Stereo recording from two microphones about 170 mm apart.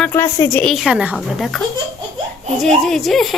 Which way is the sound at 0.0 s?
15° left (ahead or behind).